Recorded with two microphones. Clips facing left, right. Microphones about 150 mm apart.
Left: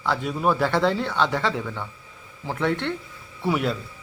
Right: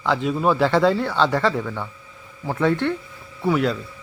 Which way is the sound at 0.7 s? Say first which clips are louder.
Right 4 dB; 10° right (ahead or behind).